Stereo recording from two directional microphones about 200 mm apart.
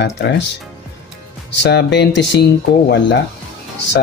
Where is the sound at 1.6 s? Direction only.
60° left (ahead or behind).